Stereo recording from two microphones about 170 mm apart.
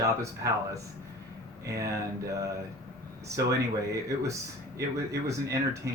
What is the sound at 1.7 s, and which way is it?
Speech, 20° right (ahead or behind).